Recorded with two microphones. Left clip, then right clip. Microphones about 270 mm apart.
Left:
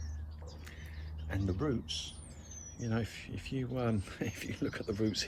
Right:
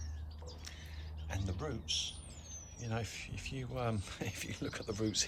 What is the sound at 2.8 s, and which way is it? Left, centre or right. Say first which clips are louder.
Speech: left 3 dB; centre.